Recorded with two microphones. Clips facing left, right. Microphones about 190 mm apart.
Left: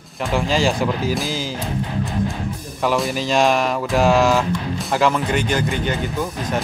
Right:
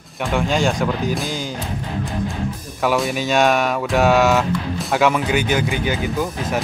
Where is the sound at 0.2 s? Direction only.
Centre (ahead or behind).